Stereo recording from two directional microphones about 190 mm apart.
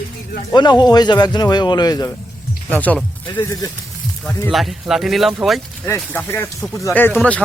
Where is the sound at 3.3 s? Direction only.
20° left (ahead or behind).